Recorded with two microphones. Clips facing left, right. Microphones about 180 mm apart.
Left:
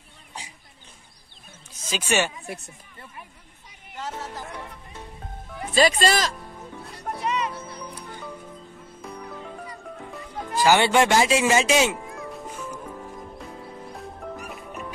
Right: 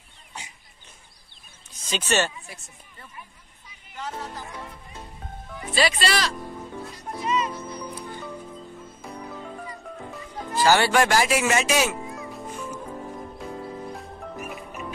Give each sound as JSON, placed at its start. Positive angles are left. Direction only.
{"t": 1.7, "sound": "speech", "side_deg": 10}
{"t": 2.4, "sound": "speech", "side_deg": 60}
{"t": 4.0, "sound": "speech", "side_deg": 0}
{"t": 5.8, "sound": "speech", "side_deg": 45}
{"t": 7.0, "sound": "music", "side_deg": 65}
{"t": 9.0, "sound": "music", "side_deg": 0}
{"t": 10.6, "sound": "speech", "side_deg": 20}
{"t": 12.2, "sound": "music", "side_deg": 0}